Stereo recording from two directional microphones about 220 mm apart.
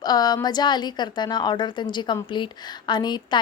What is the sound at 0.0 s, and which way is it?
A woman's voice, 20° left (ahead or behind).